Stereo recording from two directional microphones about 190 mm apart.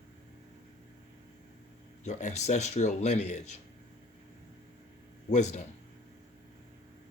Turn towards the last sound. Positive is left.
turn(degrees=35)  # may be behind; listen again after turning